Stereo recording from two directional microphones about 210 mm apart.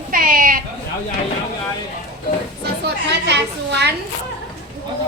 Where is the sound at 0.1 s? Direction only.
40° right (ahead or behind).